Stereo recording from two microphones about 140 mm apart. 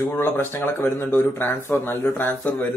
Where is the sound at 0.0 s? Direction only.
20° left (ahead or behind).